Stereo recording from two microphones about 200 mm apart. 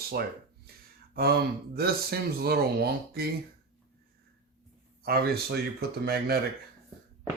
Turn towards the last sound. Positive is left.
turn(degrees=-50)  # may be behind; listen again after turning